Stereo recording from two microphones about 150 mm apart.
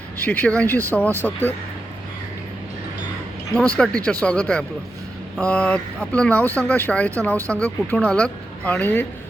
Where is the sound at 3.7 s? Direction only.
10° left (ahead or behind).